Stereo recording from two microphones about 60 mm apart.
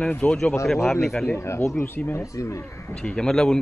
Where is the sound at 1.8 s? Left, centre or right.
Left.